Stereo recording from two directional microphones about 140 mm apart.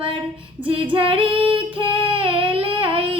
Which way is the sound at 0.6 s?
40° right (ahead or behind).